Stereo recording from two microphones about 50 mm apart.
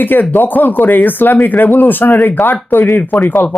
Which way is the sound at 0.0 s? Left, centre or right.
Left.